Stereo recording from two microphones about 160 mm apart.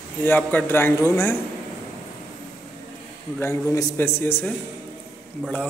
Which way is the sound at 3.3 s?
15° left (ahead or behind).